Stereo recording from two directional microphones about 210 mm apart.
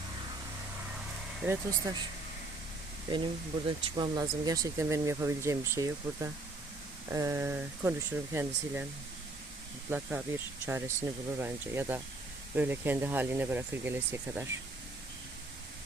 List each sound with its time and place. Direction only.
1.5 s speech: 15° right (ahead or behind)
3.1 s speech: 20° right (ahead or behind)
9.9 s speech: 10° right (ahead or behind)